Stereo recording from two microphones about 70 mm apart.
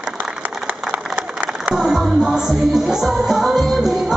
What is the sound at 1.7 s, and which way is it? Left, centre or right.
Music, centre.